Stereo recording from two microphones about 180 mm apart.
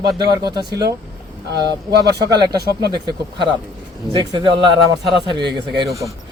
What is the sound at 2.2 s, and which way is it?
Speech, 20° right (ahead or behind).